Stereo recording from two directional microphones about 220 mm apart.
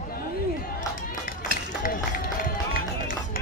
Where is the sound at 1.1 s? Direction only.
40° left (ahead or behind).